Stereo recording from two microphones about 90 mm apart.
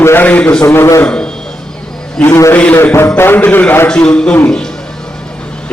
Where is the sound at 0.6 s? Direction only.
30° left (ahead or behind).